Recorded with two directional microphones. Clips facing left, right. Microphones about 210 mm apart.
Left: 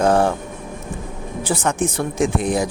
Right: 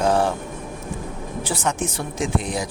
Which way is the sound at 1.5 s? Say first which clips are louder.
Left 5 dB; 55° left (ahead or behind).